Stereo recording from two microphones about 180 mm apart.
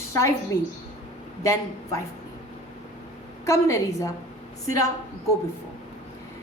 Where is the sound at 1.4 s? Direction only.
15° left (ahead or behind).